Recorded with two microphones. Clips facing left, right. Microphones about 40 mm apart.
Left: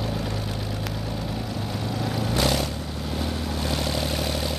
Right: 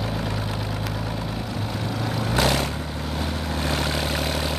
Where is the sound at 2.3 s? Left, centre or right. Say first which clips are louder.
Right 3 dB; right.